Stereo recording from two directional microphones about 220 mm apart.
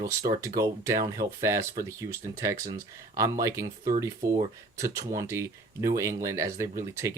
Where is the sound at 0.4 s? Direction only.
15° right (ahead or behind).